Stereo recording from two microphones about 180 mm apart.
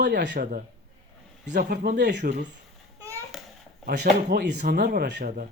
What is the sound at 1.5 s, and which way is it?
Speech, 60° right (ahead or behind).